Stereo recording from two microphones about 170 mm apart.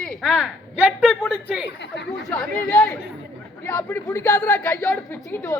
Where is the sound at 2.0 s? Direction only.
90° left.